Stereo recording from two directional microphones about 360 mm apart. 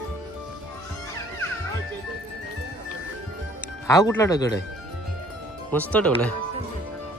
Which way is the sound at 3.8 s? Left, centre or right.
Centre.